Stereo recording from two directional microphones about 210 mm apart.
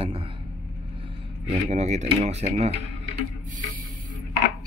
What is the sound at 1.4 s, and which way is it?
Speech, 30° right (ahead or behind).